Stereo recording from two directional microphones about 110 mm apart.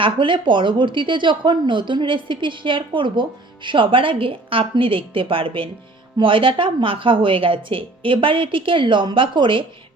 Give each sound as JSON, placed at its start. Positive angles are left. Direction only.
{"t": 0.0, "sound": "a woman's voice", "side_deg": -50}